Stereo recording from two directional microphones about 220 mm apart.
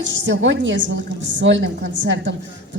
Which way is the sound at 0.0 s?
55° right (ahead or behind).